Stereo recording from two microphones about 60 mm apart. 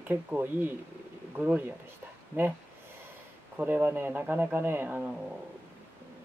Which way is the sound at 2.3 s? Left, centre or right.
Right.